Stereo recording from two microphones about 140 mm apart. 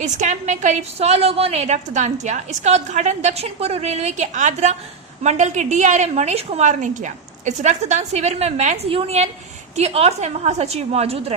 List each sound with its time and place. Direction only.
0.0 s a woman's voice: 60° right (ahead or behind)